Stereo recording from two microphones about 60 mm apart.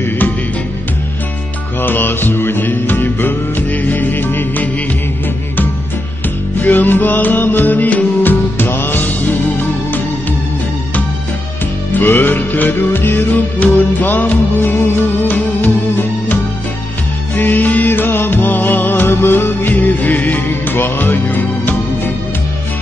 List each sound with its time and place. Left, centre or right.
1.8 s music: left
6.6 s music: left
11.9 s music: left
17.4 s music: left